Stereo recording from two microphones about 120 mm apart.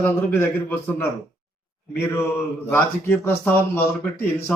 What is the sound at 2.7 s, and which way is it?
Speech, 20° left (ahead or behind).